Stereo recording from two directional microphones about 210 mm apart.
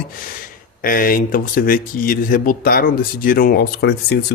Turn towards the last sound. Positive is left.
turn(degrees=50)  # may be behind; listen again after turning